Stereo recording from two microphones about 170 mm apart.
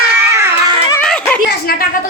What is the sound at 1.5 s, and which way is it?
Speech, 60° left (ahead or behind).